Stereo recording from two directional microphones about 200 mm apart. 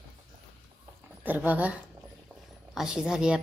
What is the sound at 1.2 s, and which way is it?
Speech, 10° right (ahead or behind).